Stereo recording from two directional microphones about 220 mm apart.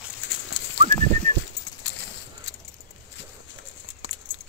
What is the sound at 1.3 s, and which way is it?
Bird flight, 35° right (ahead or behind).